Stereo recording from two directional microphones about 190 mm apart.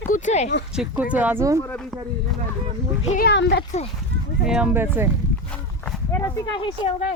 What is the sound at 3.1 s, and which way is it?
Speech, 60° left (ahead or behind).